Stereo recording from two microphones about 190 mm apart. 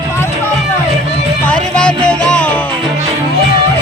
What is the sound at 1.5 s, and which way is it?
Music, 5° left (ahead or behind).